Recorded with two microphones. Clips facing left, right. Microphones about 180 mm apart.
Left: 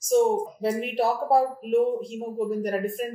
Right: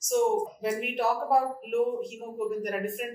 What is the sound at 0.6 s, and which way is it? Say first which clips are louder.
Speech: left 7 dB; 30° left (ahead or behind).